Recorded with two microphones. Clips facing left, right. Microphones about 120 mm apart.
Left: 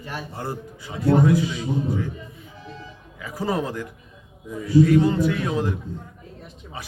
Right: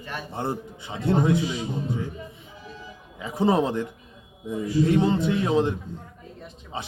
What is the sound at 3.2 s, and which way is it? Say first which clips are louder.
A man's voice: right 4 dB; 25° right (ahead or behind).